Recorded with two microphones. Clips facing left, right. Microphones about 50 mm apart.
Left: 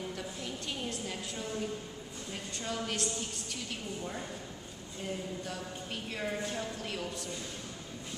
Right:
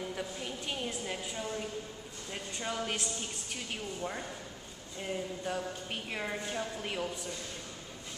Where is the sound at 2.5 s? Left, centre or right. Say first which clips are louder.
Right 1 dB; centre.